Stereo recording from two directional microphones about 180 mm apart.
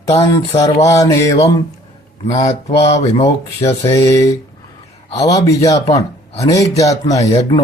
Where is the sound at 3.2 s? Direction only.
15° left (ahead or behind).